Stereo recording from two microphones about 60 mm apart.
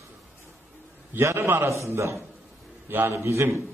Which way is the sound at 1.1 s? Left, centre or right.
Right.